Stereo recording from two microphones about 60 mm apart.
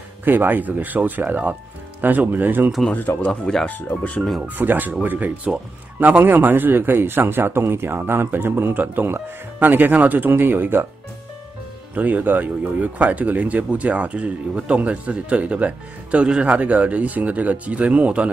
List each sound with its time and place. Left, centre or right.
0.2 s speech: right
2.9 s speech: left
3.3 s speech: centre
3.6 s speech: left
4.4 s speech: right
11.9 s speech: right